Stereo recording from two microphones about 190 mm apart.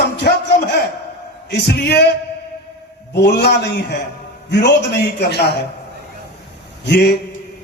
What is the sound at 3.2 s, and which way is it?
Speech, 60° left (ahead or behind).